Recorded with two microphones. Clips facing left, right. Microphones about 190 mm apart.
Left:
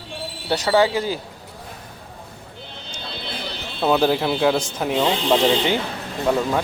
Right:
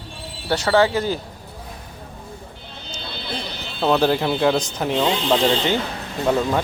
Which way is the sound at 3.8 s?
5° left (ahead or behind).